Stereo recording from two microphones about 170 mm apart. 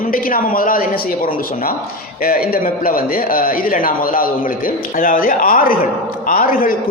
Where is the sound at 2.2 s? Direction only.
60° left (ahead or behind).